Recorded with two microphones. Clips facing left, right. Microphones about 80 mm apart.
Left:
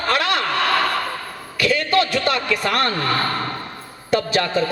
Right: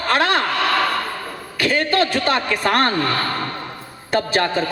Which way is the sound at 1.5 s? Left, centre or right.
Right.